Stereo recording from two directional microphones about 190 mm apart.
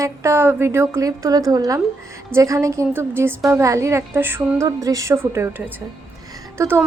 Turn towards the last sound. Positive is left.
turn(degrees=-10)  # may be behind; listen again after turning